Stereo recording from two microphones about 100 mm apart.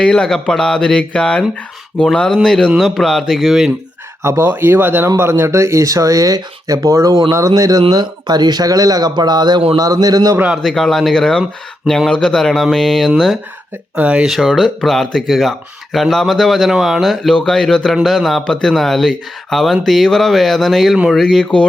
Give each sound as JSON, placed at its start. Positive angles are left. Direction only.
{"t": 0.0, "sound": "speech", "side_deg": 5}
{"t": 4.2, "sound": "a man's voice", "side_deg": -25}
{"t": 10.3, "sound": "a man's voice", "side_deg": -10}
{"t": 10.6, "sound": "speech", "side_deg": 5}
{"t": 13.9, "sound": "speech", "side_deg": -10}